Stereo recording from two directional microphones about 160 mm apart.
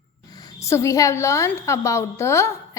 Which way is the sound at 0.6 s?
20° left (ahead or behind).